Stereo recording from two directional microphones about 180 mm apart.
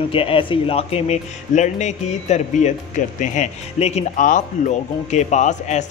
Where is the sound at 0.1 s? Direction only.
30° left (ahead or behind).